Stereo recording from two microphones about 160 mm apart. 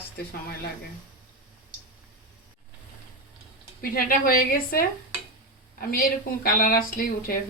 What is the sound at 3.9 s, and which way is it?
A woman's voice, 65° left (ahead or behind).